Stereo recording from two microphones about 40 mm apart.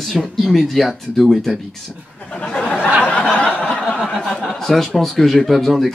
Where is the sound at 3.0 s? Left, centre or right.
Left.